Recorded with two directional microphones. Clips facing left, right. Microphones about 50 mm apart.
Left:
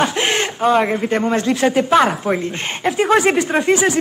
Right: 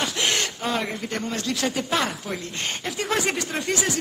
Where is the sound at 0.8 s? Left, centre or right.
Left.